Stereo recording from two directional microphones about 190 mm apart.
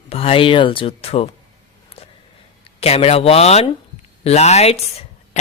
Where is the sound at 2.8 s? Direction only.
30° left (ahead or behind).